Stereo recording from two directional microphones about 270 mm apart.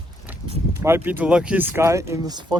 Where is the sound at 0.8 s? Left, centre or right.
Centre.